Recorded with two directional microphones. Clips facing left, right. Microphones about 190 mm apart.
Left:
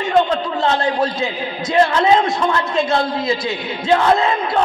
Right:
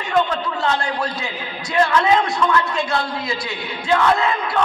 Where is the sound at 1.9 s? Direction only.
30° left (ahead or behind).